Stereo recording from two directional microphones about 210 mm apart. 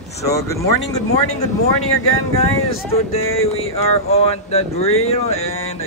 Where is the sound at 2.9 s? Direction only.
30° left (ahead or behind).